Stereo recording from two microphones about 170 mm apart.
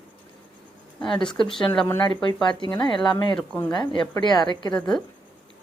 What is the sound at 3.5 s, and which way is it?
Speech, 10° left (ahead or behind).